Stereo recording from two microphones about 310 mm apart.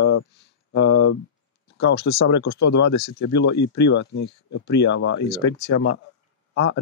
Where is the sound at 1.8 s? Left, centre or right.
Left.